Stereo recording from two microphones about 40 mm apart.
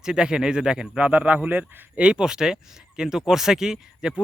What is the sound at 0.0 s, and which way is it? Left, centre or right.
Speech, centre.